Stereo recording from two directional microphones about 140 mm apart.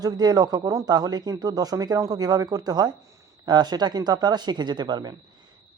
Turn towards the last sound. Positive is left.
turn(degrees=-30)  # may be behind; listen again after turning